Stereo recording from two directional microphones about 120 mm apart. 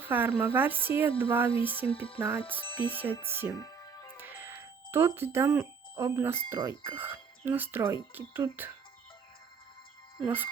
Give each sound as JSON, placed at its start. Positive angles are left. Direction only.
{"t": 0.1, "sound": "speech", "side_deg": -15}
{"t": 1.9, "sound": "music", "side_deg": 50}
{"t": 2.1, "sound": "speech", "side_deg": -20}
{"t": 2.6, "sound": "speech", "side_deg": 50}
{"t": 2.9, "sound": "speech", "side_deg": -15}
{"t": 3.6, "sound": "music", "side_deg": 30}
{"t": 4.2, "sound": "music", "side_deg": -20}
{"t": 6.1, "sound": "speech", "side_deg": -20}
{"t": 10.2, "sound": "speech", "side_deg": -15}